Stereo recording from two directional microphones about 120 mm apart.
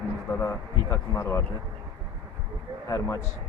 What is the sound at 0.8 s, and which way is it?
Speech, 25° left (ahead or behind).